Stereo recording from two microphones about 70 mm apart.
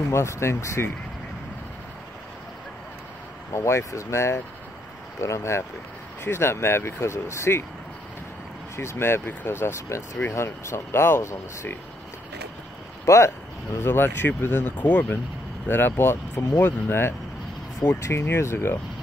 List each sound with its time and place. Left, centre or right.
0.1 s speech: left
3.5 s speech: left
8.7 s speech: left
13.0 s speech: left